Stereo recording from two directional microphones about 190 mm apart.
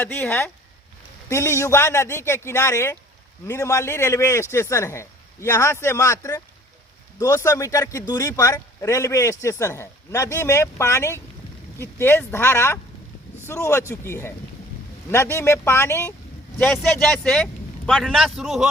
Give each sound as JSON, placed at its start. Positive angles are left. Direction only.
{"t": 0.0, "sound": "a man's voice", "side_deg": 10}